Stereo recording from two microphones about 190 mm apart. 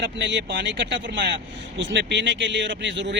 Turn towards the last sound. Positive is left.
turn(degrees=-70)  # may be behind; listen again after turning